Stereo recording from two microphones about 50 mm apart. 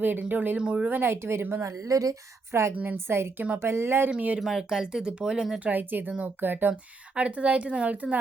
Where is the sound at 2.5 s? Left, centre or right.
Right.